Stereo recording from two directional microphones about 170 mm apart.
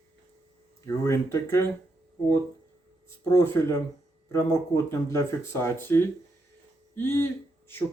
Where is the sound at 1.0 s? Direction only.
15° left (ahead or behind).